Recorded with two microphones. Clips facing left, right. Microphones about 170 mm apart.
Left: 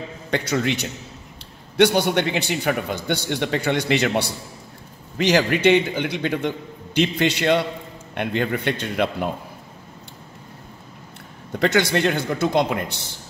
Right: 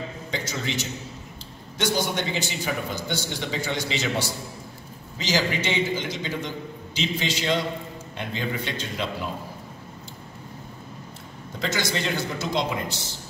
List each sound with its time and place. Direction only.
0.3 s a man's voice: 60° left (ahead or behind)
11.6 s a man's voice: 60° left (ahead or behind)